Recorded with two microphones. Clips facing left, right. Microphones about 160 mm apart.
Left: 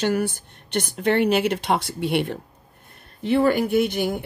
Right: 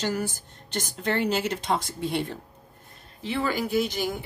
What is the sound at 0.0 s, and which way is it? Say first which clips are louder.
Speech: left 6 dB; 60° left (ahead or behind).